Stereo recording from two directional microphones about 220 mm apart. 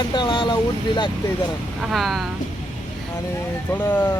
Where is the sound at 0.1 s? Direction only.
20° left (ahead or behind).